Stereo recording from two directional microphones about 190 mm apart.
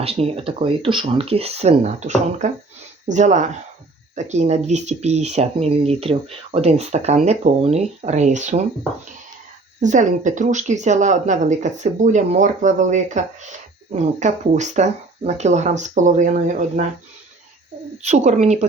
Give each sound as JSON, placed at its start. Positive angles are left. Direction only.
{"t": 0.0, "sound": "speech", "side_deg": -30}
{"t": 9.8, "sound": "speech", "side_deg": -40}
{"t": 17.9, "sound": "speech", "side_deg": -35}